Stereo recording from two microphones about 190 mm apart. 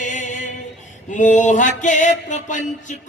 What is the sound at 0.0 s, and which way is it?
Singing, 40° left (ahead or behind).